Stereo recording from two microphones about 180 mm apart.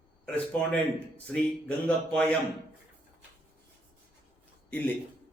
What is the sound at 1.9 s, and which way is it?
Speech, 10° left (ahead or behind).